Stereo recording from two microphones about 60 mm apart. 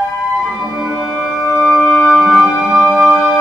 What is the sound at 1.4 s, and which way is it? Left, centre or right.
Music, right.